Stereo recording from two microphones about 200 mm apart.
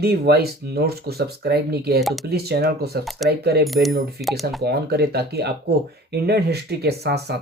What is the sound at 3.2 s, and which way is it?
Speech, 50° right (ahead or behind).